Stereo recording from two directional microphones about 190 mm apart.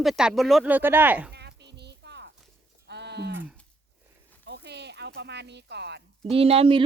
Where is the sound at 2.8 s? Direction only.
65° right (ahead or behind).